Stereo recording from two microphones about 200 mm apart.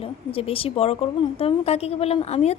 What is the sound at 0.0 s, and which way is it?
A woman's voice, 30° left (ahead or behind).